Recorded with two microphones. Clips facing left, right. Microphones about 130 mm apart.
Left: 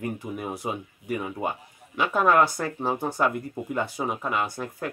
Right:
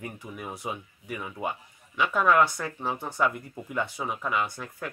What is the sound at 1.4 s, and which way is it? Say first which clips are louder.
Speech: left 2 dB; 35° left (ahead or behind).